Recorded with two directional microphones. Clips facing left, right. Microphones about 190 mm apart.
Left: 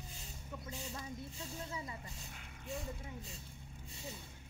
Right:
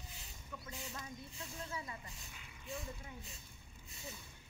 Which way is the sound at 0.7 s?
30° left (ahead or behind).